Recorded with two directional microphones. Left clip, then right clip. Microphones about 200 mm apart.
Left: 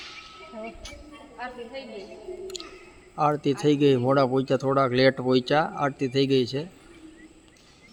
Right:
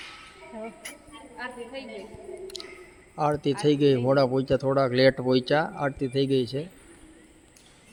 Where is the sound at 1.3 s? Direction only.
55° right (ahead or behind).